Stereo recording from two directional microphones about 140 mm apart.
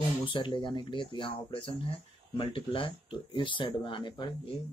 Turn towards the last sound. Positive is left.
turn(degrees=35)  # may be behind; listen again after turning